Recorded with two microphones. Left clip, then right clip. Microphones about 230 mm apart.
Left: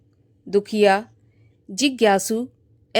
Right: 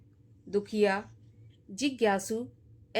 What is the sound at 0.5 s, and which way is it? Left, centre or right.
A woman's voice, left.